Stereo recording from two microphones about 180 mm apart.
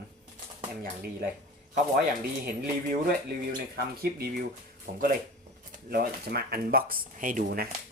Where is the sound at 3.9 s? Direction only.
60° right (ahead or behind).